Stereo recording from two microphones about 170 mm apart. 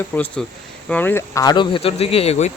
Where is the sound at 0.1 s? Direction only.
10° left (ahead or behind).